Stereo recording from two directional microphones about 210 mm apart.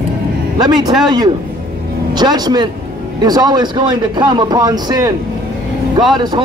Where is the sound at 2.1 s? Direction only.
20° right (ahead or behind).